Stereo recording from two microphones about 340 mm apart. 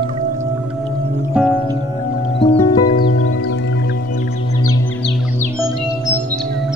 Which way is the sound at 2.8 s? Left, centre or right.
Left.